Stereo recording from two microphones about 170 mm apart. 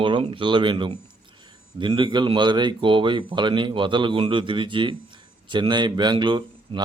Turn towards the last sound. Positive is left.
turn(degrees=-30)  # may be behind; listen again after turning